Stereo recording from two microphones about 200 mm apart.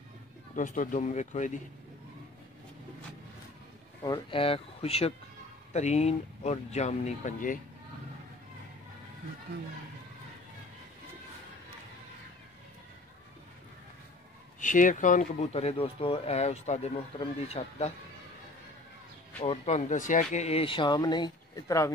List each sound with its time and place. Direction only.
0.6 s speech: 40° left (ahead or behind)
4.0 s speech: 25° left (ahead or behind); by 7.6 s 40° left (ahead or behind)
14.6 s speech: 40° left (ahead or behind)
19.4 s speech: 30° left (ahead or behind); by 21.9 s 15° left (ahead or behind)